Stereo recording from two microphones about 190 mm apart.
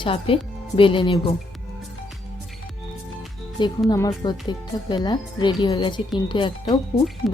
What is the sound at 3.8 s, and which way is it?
A woman's voice, 20° left (ahead or behind).